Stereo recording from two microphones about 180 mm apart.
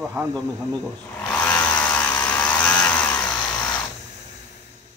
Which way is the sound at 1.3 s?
5° left (ahead or behind).